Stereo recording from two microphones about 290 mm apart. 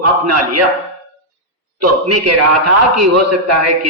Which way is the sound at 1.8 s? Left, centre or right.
Right.